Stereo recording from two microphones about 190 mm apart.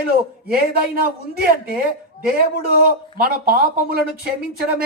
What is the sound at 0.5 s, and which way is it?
A man's voice, 50° right (ahead or behind).